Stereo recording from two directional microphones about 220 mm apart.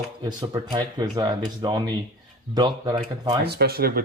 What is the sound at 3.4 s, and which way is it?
Speech, 45° right (ahead or behind).